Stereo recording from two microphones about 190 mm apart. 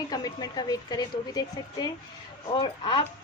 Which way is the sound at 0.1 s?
20° left (ahead or behind).